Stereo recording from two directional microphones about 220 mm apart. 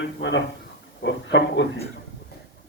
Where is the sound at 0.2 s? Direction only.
55° left (ahead or behind).